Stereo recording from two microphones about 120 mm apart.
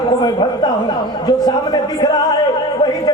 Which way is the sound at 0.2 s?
35° left (ahead or behind).